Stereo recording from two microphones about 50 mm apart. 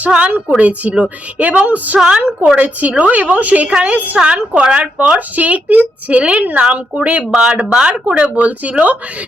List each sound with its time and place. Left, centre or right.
0.1 s a woman's voice: right
2.0 s speech: centre
2.6 s a woman's voice: right
4.2 s speech: right
8.1 s speech: right